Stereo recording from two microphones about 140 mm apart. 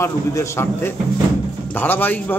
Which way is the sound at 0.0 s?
20° left (ahead or behind).